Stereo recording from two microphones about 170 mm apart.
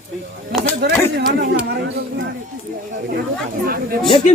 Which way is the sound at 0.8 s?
80° right.